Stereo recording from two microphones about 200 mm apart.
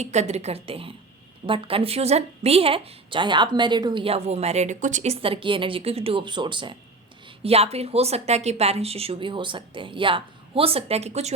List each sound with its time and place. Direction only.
0.0 s a woman's voice: 35° right (ahead or behind)